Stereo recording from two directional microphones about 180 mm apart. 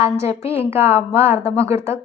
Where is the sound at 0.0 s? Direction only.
15° right (ahead or behind).